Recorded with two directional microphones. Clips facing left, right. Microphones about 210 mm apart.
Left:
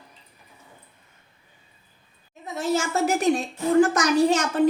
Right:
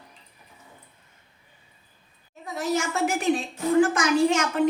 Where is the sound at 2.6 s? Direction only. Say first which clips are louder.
Left 2 dB; 30° left (ahead or behind).